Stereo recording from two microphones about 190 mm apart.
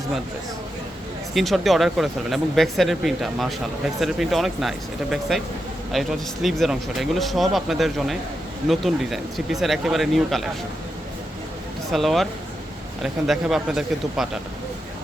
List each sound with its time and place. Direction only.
1.3 s speech: centre (ahead or behind)
11.9 s speech: centre (ahead or behind)